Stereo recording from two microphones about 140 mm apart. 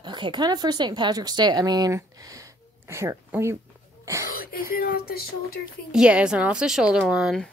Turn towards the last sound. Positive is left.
turn(degrees=0)  # may be behind; listen again after turning